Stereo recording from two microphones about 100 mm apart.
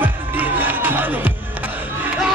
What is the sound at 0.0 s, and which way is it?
Music, 20° right (ahead or behind).